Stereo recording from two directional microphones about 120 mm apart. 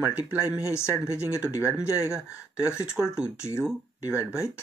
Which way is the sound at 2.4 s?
25° left (ahead or behind).